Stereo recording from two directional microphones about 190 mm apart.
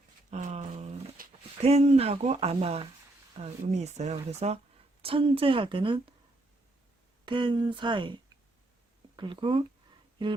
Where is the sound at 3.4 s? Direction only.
35° right (ahead or behind).